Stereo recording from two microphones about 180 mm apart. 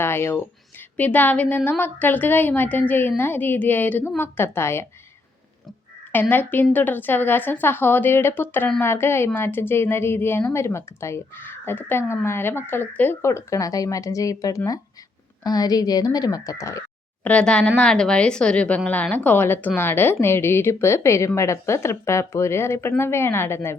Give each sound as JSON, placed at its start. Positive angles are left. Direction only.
{"t": 0.0, "sound": "a woman's voice", "side_deg": 15}
{"t": 6.1, "sound": "a woman's voice", "side_deg": 10}
{"t": 17.2, "sound": "a woman's voice", "side_deg": 5}